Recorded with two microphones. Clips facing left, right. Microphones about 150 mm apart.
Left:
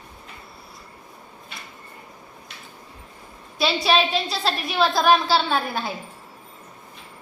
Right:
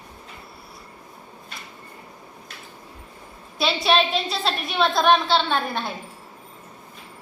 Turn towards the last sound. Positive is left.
turn(degrees=5)  # may be behind; listen again after turning